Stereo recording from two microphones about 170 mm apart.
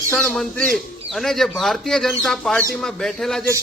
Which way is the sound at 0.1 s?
5° left (ahead or behind).